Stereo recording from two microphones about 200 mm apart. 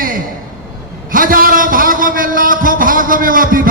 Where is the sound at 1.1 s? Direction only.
45° right (ahead or behind).